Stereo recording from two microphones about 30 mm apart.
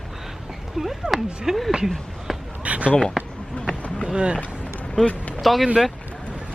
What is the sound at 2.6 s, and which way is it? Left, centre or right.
Speech, right.